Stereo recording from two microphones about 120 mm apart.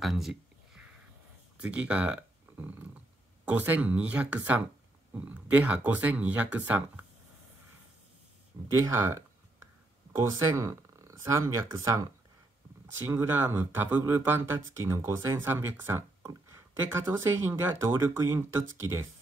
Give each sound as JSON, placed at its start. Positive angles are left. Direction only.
{"t": 0.0, "sound": "a sound", "side_deg": 0}
{"t": 1.6, "sound": "speech", "side_deg": -10}
{"t": 8.7, "sound": "speech", "side_deg": -25}